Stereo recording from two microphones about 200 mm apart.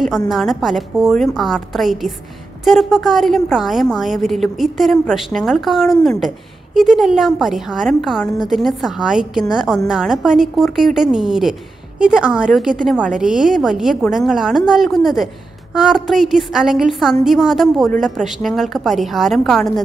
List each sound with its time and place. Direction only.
0.3 s a woman's voice: centre (ahead or behind)